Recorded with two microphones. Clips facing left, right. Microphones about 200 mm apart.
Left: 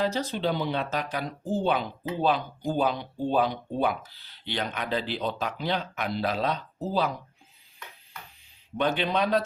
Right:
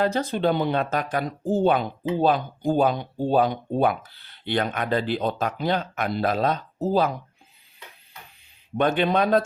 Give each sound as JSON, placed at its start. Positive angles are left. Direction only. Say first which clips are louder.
{"t": 0.0, "sound": "speech", "louder": "right 5 dB", "side_deg": -55}
{"t": 8.8, "sound": "speech", "louder": "right 5 dB", "side_deg": -50}